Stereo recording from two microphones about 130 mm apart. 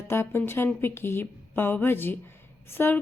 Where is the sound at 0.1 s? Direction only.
20° left (ahead or behind).